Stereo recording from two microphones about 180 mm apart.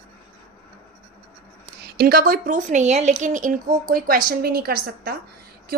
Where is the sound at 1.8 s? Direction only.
55° right (ahead or behind).